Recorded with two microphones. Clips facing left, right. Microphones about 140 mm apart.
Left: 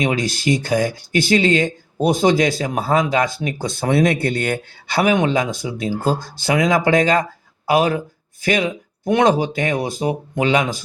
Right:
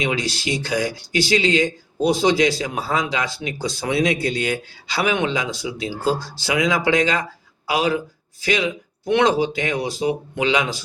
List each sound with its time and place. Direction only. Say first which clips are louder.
0.0 s speech: left 4 dB; 45° left (ahead or behind)